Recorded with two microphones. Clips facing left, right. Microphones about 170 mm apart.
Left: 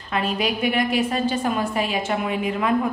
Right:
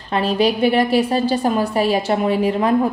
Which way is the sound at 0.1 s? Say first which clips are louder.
Right 6 dB; 30° right (ahead or behind).